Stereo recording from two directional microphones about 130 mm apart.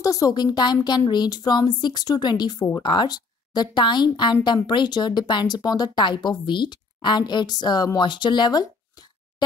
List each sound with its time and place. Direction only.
0.0 s a woman's voice: 25° left (ahead or behind)